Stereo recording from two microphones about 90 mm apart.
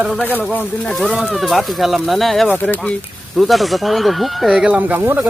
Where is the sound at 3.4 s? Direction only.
Centre (ahead or behind); by 5.2 s 20° right (ahead or behind).